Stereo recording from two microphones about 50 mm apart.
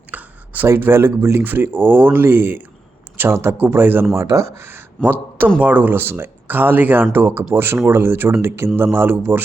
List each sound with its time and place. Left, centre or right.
0.1 s a sound: right
0.8 s speech: right
4.1 s speech: right
4.5 s speech: right